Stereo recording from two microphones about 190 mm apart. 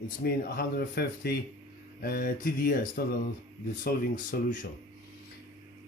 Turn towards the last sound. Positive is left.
turn(degrees=45)  # may be behind; listen again after turning